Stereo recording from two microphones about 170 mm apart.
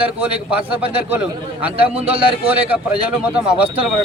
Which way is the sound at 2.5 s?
10° right (ahead or behind).